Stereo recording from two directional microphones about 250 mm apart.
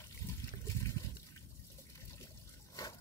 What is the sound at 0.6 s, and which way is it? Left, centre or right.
Liquid, centre.